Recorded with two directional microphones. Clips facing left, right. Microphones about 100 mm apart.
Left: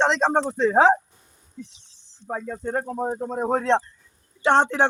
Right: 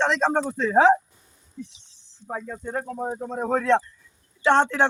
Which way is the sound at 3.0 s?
25° left (ahead or behind).